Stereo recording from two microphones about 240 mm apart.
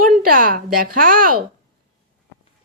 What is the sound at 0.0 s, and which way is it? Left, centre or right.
A woman's voice, right.